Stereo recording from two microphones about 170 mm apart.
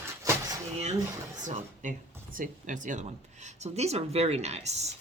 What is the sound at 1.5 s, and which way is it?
Speech, 50° right (ahead or behind).